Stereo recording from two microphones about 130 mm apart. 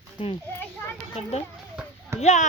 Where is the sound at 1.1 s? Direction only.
50° left (ahead or behind).